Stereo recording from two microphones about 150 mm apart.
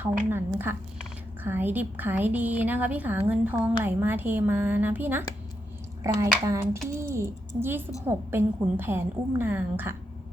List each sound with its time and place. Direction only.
0.3 s a woman's voice: 15° right (ahead or behind)